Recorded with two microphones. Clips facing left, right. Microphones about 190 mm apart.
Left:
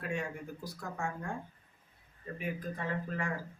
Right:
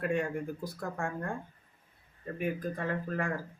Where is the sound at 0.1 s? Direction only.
55° right (ahead or behind).